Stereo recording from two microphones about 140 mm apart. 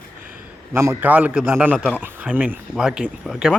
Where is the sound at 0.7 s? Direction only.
20° right (ahead or behind).